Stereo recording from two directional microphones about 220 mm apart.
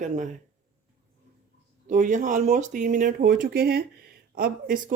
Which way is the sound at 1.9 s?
35° right (ahead or behind).